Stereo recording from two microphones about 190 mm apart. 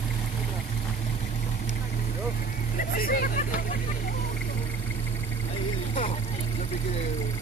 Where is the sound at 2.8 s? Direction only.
45° left (ahead or behind).